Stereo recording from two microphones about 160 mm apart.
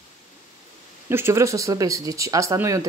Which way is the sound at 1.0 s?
15° right (ahead or behind).